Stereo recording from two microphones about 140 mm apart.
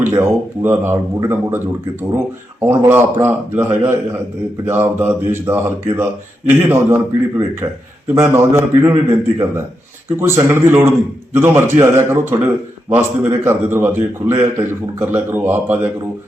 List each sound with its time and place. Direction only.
0.0 s a man's voice: 20° right (ahead or behind)